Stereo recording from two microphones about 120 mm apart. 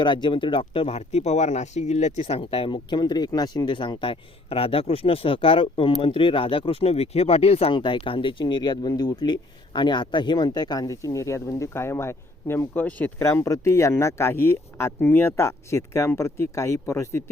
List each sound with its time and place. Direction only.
0.0 s speech: 40° left (ahead or behind)
2.7 s speech: 40° left (ahead or behind); by 7.7 s 55° left (ahead or behind)
7.7 s speech: 40° left (ahead or behind); by 17.2 s 20° left (ahead or behind)